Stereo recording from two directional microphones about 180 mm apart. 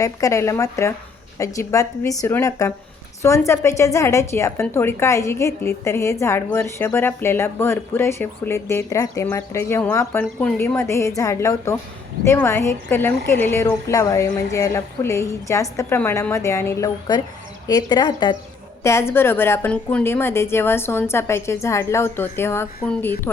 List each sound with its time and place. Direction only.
0.0 s a woman's voice: 20° left (ahead or behind)